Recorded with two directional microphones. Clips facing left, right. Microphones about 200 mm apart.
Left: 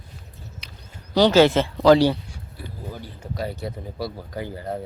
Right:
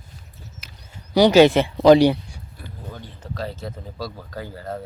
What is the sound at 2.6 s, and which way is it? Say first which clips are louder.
Speech: left 2 dB; 10° left (ahead or behind).